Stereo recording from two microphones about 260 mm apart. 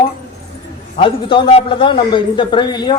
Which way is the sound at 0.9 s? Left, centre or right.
Centre.